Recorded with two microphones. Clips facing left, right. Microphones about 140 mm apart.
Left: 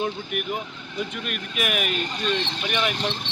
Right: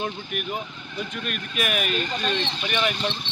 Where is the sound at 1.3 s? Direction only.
10° left (ahead or behind).